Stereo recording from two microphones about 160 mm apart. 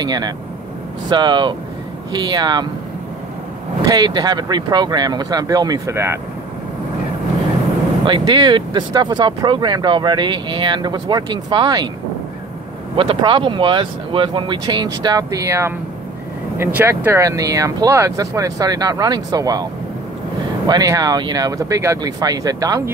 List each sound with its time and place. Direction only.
0.0 s speech: 25° right (ahead or behind)
3.9 s speech: 25° right (ahead or behind)
8.0 s speech: 30° right (ahead or behind)
12.9 s speech: 35° right (ahead or behind)